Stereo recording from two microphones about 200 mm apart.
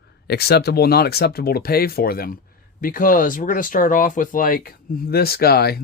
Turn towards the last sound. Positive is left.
turn(degrees=50)  # may be behind; listen again after turning